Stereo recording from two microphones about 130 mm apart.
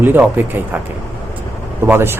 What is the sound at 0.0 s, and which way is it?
Speech, 15° right (ahead or behind).